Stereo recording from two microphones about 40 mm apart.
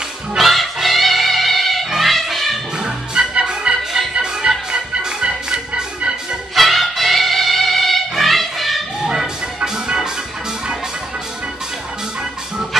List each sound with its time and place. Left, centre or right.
0.4 s music: centre
2.8 s music: right
6.5 s music: centre
9.6 s music: centre